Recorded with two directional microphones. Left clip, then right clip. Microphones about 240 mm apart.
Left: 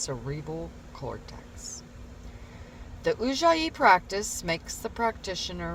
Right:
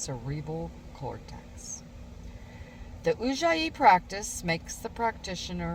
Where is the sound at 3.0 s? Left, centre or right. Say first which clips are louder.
Left 2 dB; left.